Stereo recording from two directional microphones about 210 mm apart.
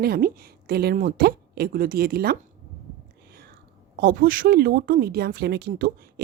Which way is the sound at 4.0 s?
45° right (ahead or behind).